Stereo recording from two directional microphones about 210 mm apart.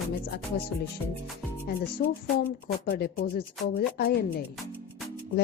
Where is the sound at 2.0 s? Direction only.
45° left (ahead or behind).